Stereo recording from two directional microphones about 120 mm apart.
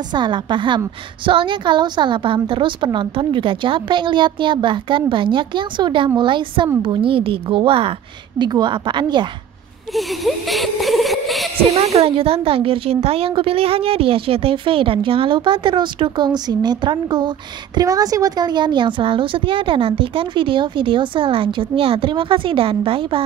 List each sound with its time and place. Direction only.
0.1 s a woman's voice: 40° right (ahead or behind)
8.4 s a woman's voice: 35° right (ahead or behind)
9.9 s speech: centre (ahead or behind)
11.7 s speech: 60° right (ahead or behind)